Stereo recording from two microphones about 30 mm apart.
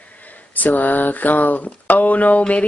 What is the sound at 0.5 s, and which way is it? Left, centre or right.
Speech, left.